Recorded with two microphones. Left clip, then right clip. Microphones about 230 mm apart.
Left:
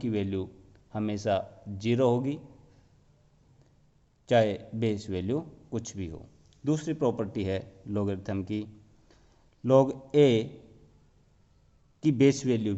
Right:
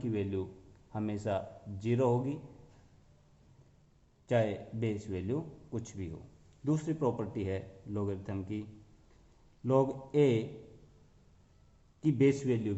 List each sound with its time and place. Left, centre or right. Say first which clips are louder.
0.0 s a man's voice: left 4 dB; left
4.3 s speech: left 7 dB; left
9.6 s speech: left 7 dB; left
11.9 s speech: left 5 dB; left